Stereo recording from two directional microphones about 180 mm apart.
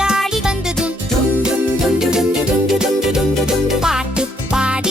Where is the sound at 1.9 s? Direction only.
5° right (ahead or behind).